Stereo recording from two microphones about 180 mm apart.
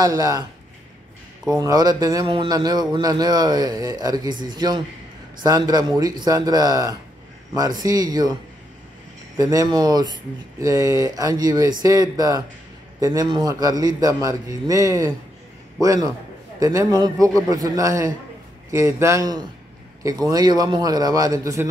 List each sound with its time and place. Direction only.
0.0 s speech: 20° right (ahead or behind)
1.6 s speech: 20° right (ahead or behind)
9.4 s a man's voice: 20° right (ahead or behind)